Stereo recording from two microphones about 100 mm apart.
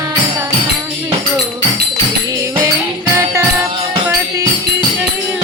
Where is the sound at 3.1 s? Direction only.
30° right (ahead or behind).